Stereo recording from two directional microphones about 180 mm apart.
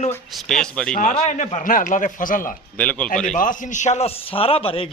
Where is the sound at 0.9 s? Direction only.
40° left (ahead or behind).